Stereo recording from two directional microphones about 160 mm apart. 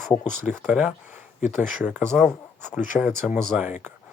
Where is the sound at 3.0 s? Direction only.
10° right (ahead or behind).